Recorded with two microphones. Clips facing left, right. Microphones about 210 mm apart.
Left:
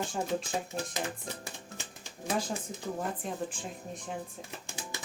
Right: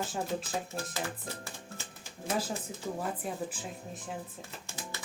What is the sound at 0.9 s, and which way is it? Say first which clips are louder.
Music: left 1 dB; 15° left (ahead or behind).